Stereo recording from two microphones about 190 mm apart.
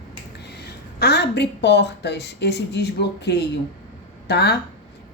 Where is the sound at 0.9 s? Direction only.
60° left (ahead or behind).